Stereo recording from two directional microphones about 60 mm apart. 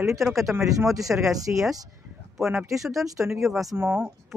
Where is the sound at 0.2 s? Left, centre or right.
Centre.